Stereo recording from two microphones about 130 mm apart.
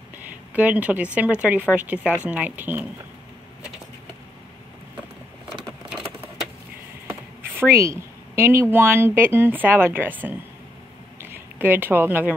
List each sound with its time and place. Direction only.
0.2 s a woman's voice: 10° right (ahead or behind)
7.1 s speech: 15° right (ahead or behind)